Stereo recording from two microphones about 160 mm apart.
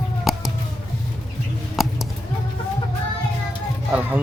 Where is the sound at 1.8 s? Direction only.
Centre (ahead or behind).